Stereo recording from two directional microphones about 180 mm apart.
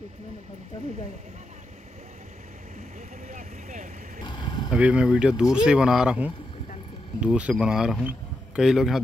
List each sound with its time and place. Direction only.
3.3 s vehicle: 45° right (ahead or behind)
4.3 s a sound: 25° left (ahead or behind)
4.6 s speech: 5° right (ahead or behind)